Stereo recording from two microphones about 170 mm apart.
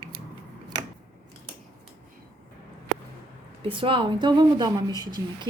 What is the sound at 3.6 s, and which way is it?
Speech, 30° right (ahead or behind).